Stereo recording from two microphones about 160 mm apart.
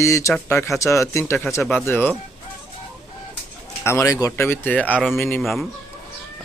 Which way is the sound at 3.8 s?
15° left (ahead or behind).